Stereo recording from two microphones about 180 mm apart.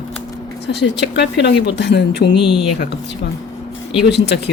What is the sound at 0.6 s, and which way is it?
Speech, 75° left (ahead or behind).